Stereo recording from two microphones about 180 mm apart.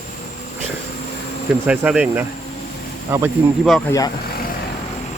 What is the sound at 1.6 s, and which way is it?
Speech, 5° right (ahead or behind).